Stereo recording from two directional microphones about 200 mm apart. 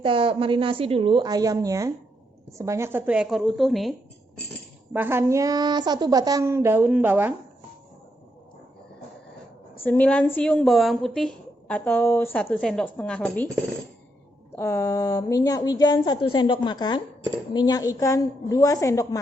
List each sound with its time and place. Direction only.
0.0 s a woman's voice: 25° right (ahead or behind); by 3.9 s centre (ahead or behind)
4.9 s a woman's voice: 10° right (ahead or behind)
9.8 s a woman's voice: 10° left (ahead or behind)
14.5 s a woman's voice: 15° left (ahead or behind)